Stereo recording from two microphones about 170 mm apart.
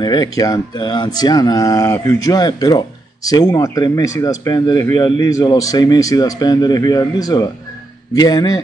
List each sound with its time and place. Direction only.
0.0 s speech: 25° left (ahead or behind)